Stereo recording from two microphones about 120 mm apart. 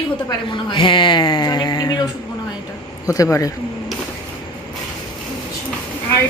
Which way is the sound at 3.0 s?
30° left (ahead or behind).